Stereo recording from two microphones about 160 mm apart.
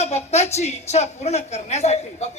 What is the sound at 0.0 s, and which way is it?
A woman's voice, 40° left (ahead or behind).